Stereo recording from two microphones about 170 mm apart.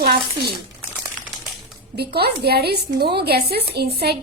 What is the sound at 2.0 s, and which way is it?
A woman's voice, 70° right (ahead or behind).